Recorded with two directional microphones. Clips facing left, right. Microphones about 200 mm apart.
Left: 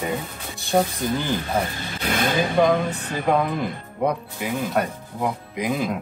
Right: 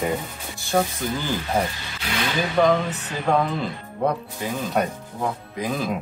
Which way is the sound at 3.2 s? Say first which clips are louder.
Even; 15° left (ahead or behind).